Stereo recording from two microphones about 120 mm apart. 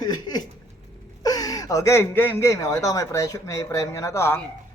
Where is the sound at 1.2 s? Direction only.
30° left (ahead or behind).